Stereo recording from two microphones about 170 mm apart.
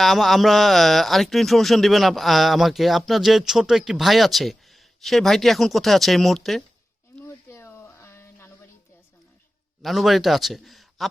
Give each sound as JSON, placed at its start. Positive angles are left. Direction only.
{"t": 0.0, "sound": "speech", "side_deg": 0}
{"t": 7.2, "sound": "a sound", "side_deg": 15}
{"t": 9.8, "sound": "a man's voice", "side_deg": 0}